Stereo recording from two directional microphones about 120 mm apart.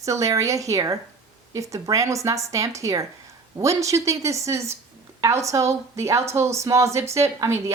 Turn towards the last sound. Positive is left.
turn(degrees=-25)  # may be behind; listen again after turning